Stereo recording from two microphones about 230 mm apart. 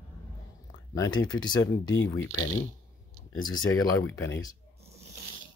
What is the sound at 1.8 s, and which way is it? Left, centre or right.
Speech, left.